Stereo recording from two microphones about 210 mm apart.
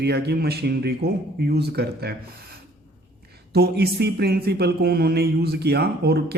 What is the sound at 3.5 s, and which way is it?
Speech, 50° right (ahead or behind).